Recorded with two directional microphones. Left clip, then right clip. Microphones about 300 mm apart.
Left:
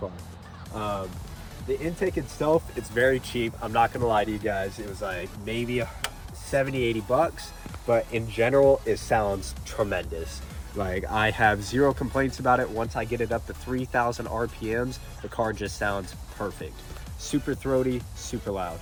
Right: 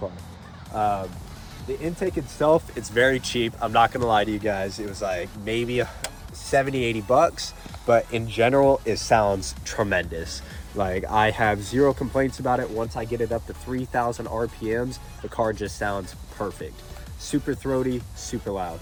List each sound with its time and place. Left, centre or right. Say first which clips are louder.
1.8 s speech: right 3 dB; centre
2.4 s speech: right 4 dB; centre
10.8 s speech: right 5 dB; centre